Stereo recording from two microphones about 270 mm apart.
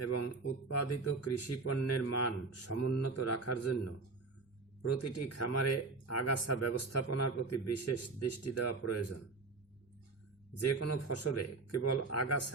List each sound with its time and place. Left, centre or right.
0.0 s a man's voice: left
10.6 s a man's voice: left